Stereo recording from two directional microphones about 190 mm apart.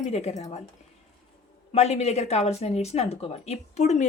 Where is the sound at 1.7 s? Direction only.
35° left (ahead or behind).